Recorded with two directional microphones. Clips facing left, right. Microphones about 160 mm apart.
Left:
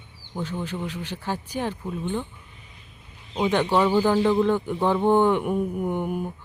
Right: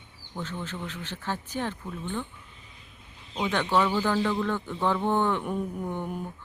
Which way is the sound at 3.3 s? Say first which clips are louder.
Left 4 dB; 15° left (ahead or behind).